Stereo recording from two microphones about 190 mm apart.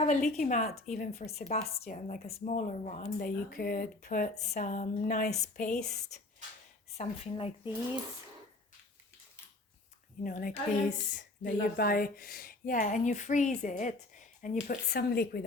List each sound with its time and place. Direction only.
0.0 s a woman's voice: 35° left (ahead or behind)
6.9 s a woman's voice: 30° left (ahead or behind)
10.2 s speech: 45° left (ahead or behind)
14.8 s speech: 55° left (ahead or behind)